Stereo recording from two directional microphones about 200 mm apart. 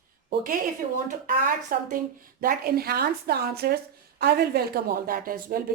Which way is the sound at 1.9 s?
45° right (ahead or behind).